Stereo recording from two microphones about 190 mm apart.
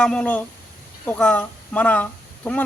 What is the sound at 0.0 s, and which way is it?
A man's voice, 5° left (ahead or behind).